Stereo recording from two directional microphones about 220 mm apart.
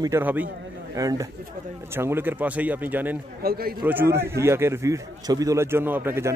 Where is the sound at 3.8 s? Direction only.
10° right (ahead or behind).